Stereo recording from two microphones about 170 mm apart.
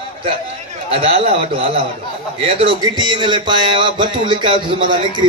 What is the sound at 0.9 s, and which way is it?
A man's voice, 35° right (ahead or behind).